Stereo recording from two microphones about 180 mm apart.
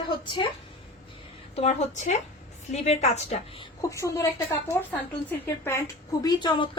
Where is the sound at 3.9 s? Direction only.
15° left (ahead or behind).